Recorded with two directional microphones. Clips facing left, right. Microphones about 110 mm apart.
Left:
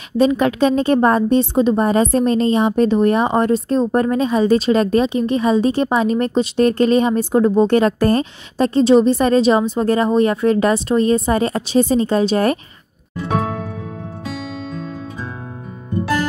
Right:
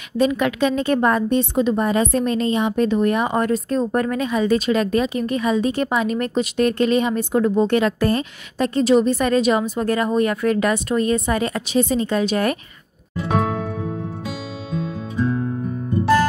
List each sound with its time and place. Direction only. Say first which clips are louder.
0.2 s a woman's voice: left 4 dB; 30° left (ahead or behind)